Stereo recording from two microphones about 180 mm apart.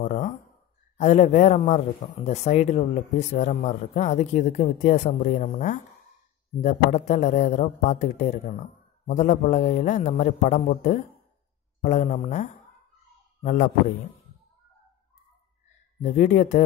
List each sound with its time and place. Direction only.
0.0 s a sound: 40° left (ahead or behind)
0.9 s a man's voice: 40° left (ahead or behind)
16.0 s speech: 40° left (ahead or behind)